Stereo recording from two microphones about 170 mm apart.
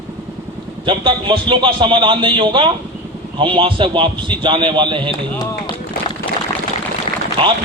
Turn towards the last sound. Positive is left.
turn(degrees=-30)  # may be behind; listen again after turning